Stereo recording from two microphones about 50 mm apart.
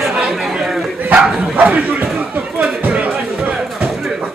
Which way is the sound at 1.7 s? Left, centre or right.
Right.